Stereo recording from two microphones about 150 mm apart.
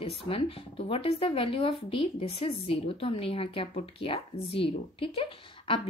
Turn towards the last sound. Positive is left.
turn(degrees=35)  # may be behind; listen again after turning